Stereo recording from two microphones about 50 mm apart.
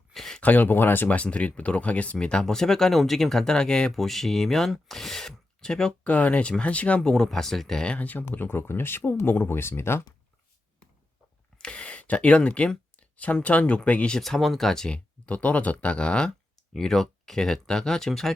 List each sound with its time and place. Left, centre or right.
0.1 s a sound: centre
0.4 s speech: left
1.0 s speech: left; by 5.9 s centre
6.1 s speech: left; by 7.8 s centre
7.9 s speech: left
11.5 s a sound: left
13.4 s speech: left
14.2 s speech: centre
14.9 s speech: left; by 18.3 s centre